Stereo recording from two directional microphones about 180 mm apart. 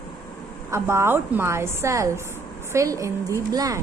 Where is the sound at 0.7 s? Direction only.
15° right (ahead or behind).